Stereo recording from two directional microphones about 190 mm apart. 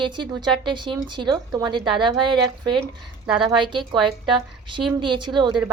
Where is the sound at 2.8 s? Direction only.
5° right (ahead or behind).